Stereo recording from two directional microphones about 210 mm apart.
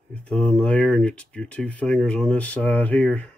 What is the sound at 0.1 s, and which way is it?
Speech, 5° left (ahead or behind).